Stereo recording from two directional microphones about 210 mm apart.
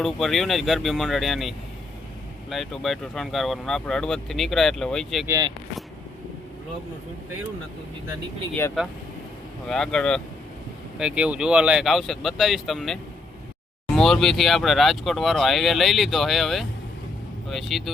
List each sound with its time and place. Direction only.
0.0 s speech: centre (ahead or behind)
5.2 s speech: 15° right (ahead or behind)
9.6 s speech: centre (ahead or behind)